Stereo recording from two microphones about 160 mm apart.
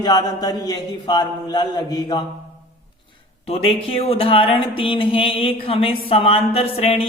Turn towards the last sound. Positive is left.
turn(degrees=40)  # may be behind; listen again after turning